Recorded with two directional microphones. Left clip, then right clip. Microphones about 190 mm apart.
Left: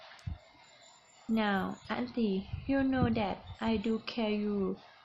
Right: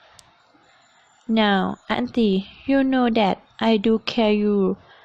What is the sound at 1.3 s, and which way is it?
A woman's voice, 45° right (ahead or behind).